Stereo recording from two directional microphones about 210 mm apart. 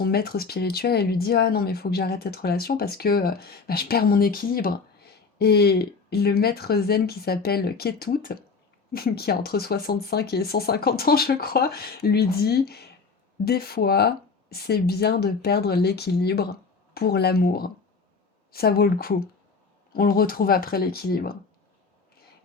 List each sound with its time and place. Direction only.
0.0 s speech: 45° left (ahead or behind)